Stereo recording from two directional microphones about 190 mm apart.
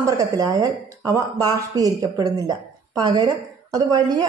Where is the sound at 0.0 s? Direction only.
20° right (ahead or behind).